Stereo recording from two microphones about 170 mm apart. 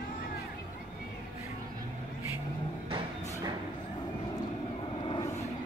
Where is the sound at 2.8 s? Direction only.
30° right (ahead or behind).